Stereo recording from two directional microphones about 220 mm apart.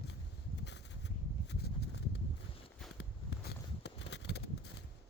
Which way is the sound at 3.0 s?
50° left (ahead or behind).